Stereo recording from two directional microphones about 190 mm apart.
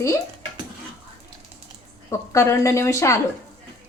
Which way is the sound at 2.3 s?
15° left (ahead or behind).